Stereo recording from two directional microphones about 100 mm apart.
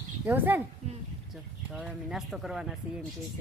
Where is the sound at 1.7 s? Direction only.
5° right (ahead or behind).